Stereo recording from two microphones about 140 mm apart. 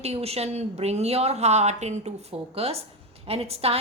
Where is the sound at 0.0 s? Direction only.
50° right (ahead or behind).